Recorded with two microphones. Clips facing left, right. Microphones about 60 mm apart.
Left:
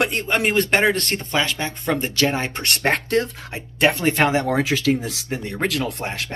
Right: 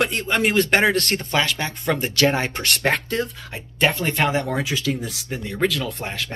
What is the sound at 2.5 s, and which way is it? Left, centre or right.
Speech, centre.